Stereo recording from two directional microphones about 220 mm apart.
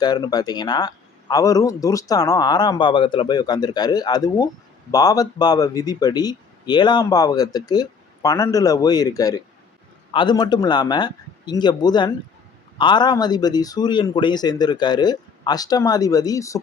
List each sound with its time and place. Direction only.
0.0 s a man's voice: 20° left (ahead or behind)